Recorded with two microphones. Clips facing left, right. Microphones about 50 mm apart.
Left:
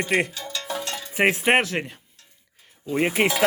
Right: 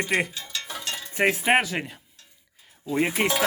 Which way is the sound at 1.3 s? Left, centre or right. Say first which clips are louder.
Left 2 dB; centre.